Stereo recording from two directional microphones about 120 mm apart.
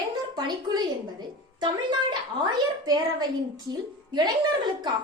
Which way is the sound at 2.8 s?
35° right (ahead or behind).